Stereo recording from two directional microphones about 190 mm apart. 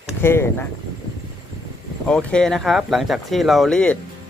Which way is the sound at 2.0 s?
5° left (ahead or behind).